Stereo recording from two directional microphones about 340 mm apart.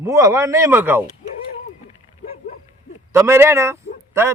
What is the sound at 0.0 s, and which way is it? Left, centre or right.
A man's voice, centre.